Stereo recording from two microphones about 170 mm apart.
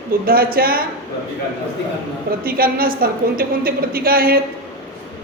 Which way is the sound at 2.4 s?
60° right (ahead or behind).